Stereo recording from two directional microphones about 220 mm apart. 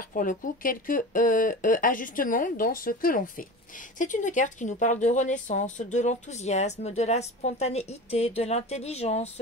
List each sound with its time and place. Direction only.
0.1 s speech: 35° left (ahead or behind)